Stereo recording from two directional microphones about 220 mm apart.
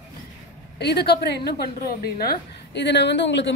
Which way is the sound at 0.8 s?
50° left (ahead or behind).